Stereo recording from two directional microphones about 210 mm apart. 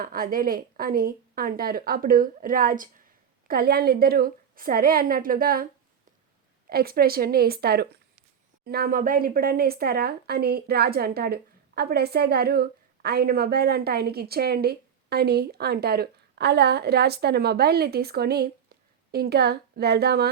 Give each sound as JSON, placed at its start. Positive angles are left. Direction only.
{"t": 0.0, "sound": "speech", "side_deg": -45}
{"t": 6.7, "sound": "speech", "side_deg": -45}